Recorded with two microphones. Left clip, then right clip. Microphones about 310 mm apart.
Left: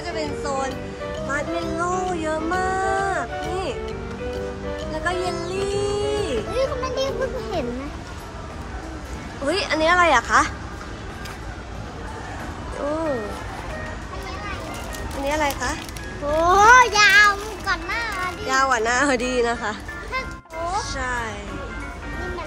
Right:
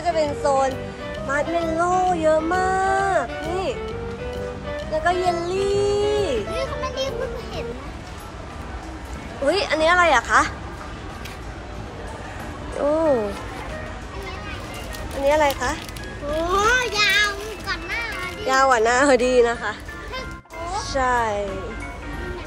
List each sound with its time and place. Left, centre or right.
0.0 s speech: centre
4.9 s speech: centre
6.5 s music: left
9.5 s a woman's voice: centre
15.2 s speech: centre
16.4 s a sound: centre
20.7 s a child's voice: centre